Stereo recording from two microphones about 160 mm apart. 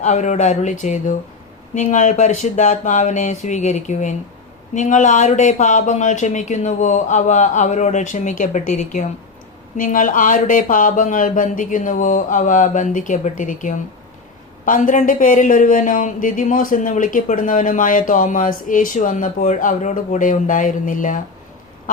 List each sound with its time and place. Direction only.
0.0 s speech: 50° left (ahead or behind)